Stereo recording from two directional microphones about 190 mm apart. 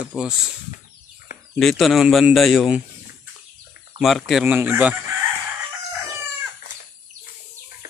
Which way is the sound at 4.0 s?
Centre (ahead or behind).